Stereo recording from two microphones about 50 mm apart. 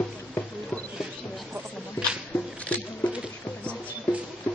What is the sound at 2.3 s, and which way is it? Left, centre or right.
Squish, left.